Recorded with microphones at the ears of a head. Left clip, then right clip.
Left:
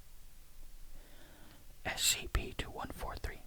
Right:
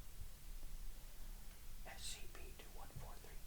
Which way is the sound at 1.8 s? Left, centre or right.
Left.